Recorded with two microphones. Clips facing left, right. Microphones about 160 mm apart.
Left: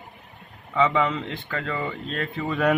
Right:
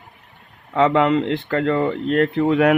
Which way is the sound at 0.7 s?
75° right (ahead or behind).